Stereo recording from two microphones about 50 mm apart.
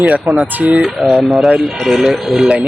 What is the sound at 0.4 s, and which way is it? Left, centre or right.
Speech, right.